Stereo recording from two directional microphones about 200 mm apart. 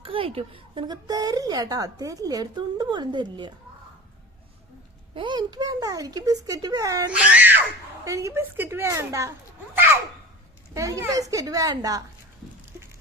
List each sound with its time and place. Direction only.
0.0 s a woman's voice: 25° right (ahead or behind)
5.1 s a woman's voice: 25° right (ahead or behind)
7.1 s a woman's voice: 5° right (ahead or behind)
9.7 s a sound: 10° right (ahead or behind)
10.8 s a woman's voice: 15° right (ahead or behind)